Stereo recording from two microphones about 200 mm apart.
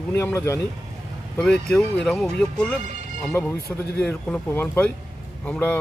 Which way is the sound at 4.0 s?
5° left (ahead or behind).